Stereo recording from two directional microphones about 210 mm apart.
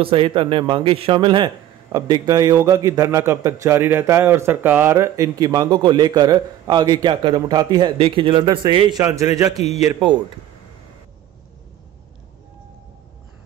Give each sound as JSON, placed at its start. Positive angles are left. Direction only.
{"t": 0.0, "sound": "a man's voice", "side_deg": -25}